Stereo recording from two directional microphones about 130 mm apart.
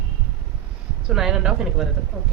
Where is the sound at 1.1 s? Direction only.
5° right (ahead or behind).